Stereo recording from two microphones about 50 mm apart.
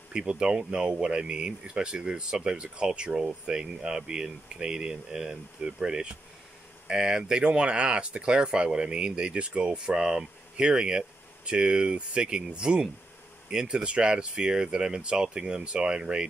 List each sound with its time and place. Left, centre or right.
0.1 s speech: centre